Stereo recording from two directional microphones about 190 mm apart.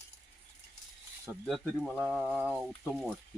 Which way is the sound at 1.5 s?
Centre (ahead or behind).